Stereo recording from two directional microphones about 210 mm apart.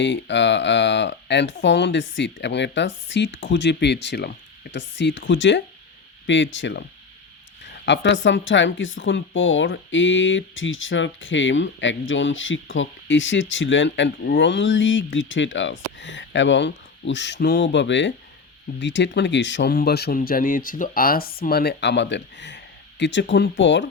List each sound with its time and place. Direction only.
0.0 s speech: 60° left (ahead or behind)